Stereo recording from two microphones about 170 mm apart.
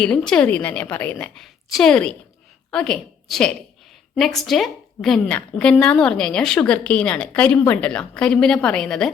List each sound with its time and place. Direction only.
0.0 s a woman's voice: 5° left (ahead or behind)